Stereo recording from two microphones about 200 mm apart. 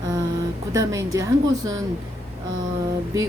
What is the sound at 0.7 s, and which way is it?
Speech, 15° right (ahead or behind).